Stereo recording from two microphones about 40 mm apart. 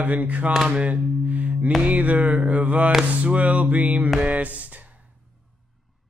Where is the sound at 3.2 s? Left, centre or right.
Right.